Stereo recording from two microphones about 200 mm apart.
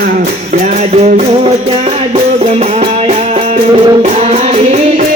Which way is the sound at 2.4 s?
35° right (ahead or behind).